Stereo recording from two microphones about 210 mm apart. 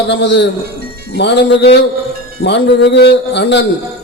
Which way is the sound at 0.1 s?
55° left (ahead or behind).